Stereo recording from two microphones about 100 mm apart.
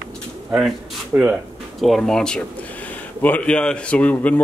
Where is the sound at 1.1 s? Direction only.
20° right (ahead or behind).